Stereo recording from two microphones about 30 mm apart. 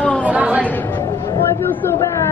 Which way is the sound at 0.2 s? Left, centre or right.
Right.